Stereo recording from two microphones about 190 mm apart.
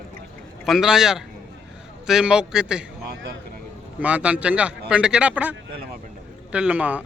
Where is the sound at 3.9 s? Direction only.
5° right (ahead or behind).